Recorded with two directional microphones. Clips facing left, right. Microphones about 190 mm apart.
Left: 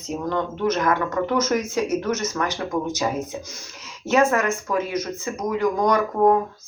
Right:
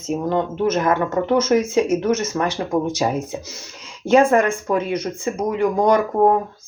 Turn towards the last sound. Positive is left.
turn(degrees=-30)  # may be behind; listen again after turning